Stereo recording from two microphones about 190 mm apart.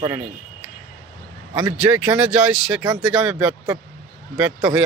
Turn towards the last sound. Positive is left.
turn(degrees=-5)  # may be behind; listen again after turning